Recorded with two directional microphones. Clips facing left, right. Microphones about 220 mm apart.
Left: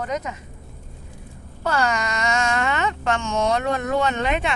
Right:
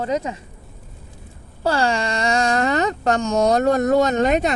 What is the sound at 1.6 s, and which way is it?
Speech, 30° right (ahead or behind).